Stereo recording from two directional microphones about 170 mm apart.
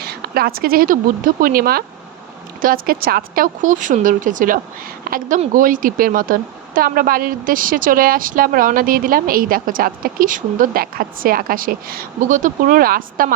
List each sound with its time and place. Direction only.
0.0 s a woman's voice: 65° right (ahead or behind)